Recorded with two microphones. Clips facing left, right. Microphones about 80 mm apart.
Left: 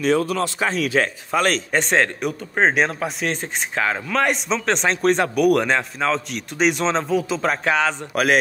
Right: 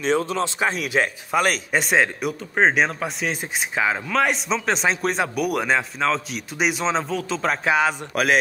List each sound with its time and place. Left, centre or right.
0.0 s speech: right; by 8.4 s centre